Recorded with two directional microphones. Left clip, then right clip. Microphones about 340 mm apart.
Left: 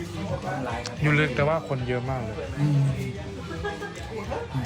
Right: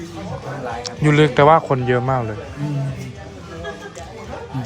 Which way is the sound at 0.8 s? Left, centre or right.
Centre.